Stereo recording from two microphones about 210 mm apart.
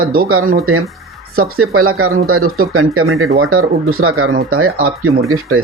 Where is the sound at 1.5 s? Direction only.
90° right.